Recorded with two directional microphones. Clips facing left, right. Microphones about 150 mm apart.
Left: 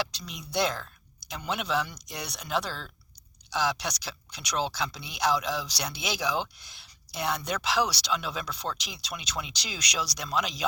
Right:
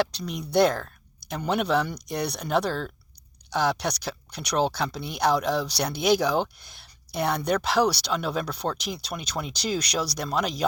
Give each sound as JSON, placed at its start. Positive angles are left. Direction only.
{"t": 0.0, "sound": "speech", "side_deg": -55}